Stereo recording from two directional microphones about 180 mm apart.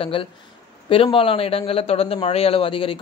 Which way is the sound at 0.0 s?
30° left (ahead or behind).